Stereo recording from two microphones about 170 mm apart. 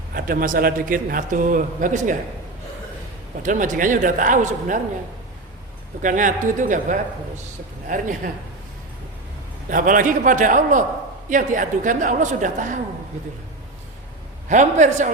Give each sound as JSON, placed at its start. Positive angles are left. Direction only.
{"t": 0.1, "sound": "a man's voice", "side_deg": -55}
{"t": 3.4, "sound": "a man's voice", "side_deg": -50}
{"t": 6.0, "sound": "a man's voice", "side_deg": -50}
{"t": 9.6, "sound": "a man's voice", "side_deg": -50}
{"t": 14.5, "sound": "a man's voice", "side_deg": -45}